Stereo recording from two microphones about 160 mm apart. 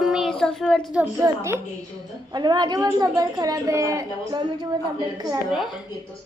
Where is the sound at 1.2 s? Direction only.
20° right (ahead or behind).